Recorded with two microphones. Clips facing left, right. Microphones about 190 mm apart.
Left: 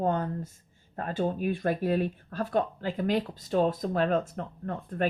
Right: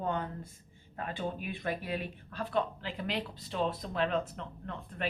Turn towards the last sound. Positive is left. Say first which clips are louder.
# left 8 dB
turn(degrees=45)  # may be behind; listen again after turning